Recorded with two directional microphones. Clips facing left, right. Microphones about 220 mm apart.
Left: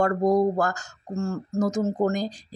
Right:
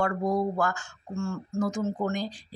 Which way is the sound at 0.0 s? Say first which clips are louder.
Left 6 dB; 40° left (ahead or behind).